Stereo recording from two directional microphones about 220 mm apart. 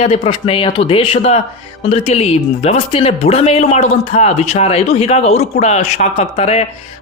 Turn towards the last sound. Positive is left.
turn(degrees=25)  # may be behind; listen again after turning